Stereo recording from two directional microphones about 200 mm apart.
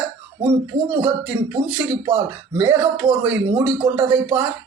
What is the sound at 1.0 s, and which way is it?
Speech, 10° right (ahead or behind).